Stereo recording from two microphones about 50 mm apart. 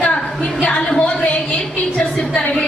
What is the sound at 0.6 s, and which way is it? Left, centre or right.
Speech, left.